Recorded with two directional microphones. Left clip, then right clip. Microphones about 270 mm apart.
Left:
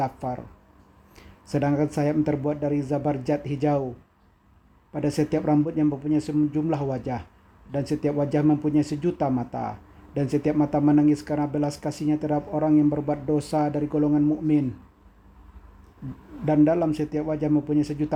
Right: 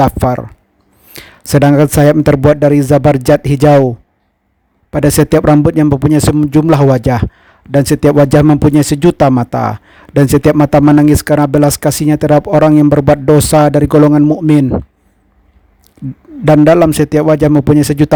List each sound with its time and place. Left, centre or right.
0.0 s speech: right
4.9 s speech: right
16.5 s speech: right